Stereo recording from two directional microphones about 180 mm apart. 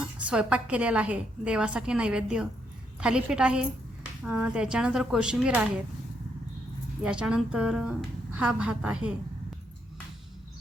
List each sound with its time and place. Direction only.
0.2 s a woman's voice: 5° right (ahead or behind)
7.0 s a woman's voice: 5° right (ahead or behind)